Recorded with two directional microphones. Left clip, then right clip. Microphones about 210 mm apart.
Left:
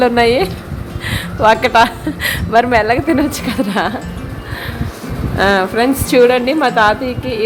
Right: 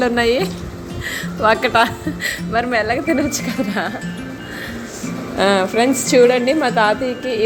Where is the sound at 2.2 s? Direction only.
20° left (ahead or behind).